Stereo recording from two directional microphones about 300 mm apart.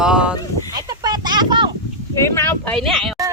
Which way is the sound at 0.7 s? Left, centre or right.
Centre.